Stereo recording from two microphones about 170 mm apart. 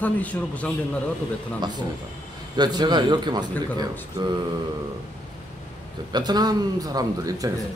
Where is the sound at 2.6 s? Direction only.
25° right (ahead or behind).